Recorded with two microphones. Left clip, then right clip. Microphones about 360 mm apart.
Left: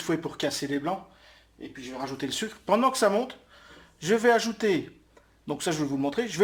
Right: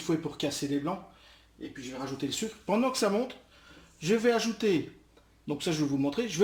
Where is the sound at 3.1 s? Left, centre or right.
Centre.